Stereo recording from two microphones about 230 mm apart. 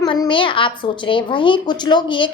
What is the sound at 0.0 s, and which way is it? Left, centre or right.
A child's voice, centre.